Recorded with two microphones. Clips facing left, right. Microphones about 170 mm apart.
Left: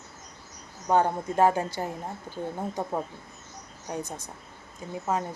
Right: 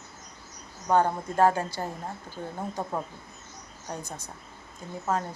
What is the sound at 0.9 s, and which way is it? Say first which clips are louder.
Speech: even; 15° left (ahead or behind).